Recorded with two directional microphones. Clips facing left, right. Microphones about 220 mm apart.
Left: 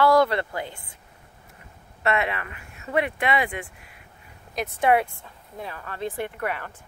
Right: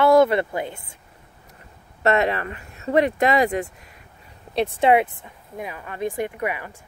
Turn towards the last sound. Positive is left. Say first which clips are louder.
# right 3 dB
turn(degrees=-10)  # may be behind; listen again after turning